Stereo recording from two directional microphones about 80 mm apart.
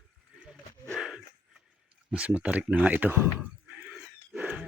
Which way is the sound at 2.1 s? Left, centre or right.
Centre.